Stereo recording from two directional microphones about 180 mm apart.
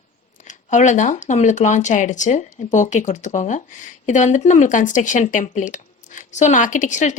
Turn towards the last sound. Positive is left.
turn(degrees=40)  # may be behind; listen again after turning